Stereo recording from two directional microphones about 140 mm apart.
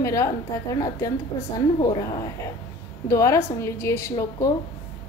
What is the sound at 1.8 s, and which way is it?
A woman's voice, 30° left (ahead or behind).